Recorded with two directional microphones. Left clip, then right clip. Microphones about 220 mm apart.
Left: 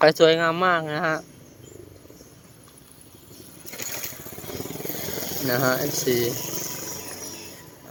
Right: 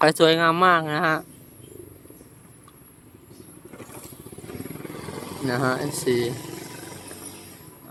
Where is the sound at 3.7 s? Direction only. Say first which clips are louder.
Left 8 dB; 20° left (ahead or behind); by 5.5 s 50° left (ahead or behind).